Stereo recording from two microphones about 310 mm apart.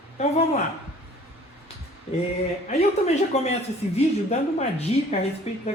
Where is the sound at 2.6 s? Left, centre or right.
Left.